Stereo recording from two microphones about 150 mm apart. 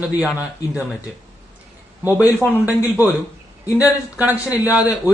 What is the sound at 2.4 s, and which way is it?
A man's voice, 10° right (ahead or behind).